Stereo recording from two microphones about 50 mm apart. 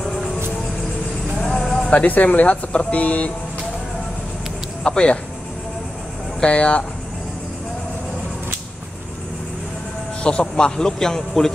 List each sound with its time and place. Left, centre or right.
1.4 s music: centre
1.9 s speech: left
4.8 s speech: centre
6.4 s speech: left
10.2 s speech: left